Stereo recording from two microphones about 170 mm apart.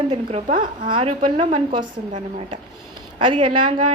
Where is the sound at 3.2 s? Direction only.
30° right (ahead or behind).